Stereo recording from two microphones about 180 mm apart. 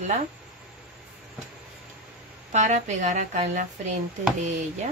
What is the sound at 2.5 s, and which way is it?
A woman's voice, 40° right (ahead or behind).